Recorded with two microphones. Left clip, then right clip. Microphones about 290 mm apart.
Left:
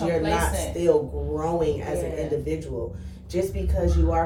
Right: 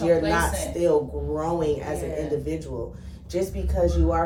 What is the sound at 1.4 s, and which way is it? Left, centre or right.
Speech, centre.